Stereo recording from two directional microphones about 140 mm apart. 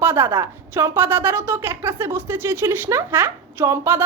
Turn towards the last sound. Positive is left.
turn(degrees=-15)  # may be behind; listen again after turning